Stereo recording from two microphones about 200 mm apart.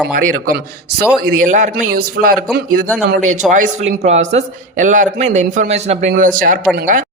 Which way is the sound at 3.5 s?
35° right (ahead or behind).